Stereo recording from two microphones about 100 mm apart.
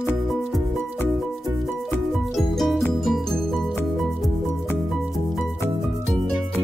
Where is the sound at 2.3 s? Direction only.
Centre (ahead or behind).